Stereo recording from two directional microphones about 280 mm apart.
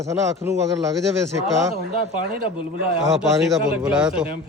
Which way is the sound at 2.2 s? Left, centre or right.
Centre.